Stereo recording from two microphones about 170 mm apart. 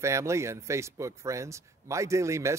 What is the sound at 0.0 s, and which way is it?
Speech, 15° right (ahead or behind).